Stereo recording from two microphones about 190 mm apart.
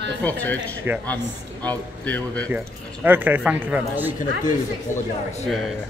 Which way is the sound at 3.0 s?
10° right (ahead or behind).